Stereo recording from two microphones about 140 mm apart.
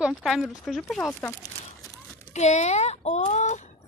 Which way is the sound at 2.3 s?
55° left (ahead or behind).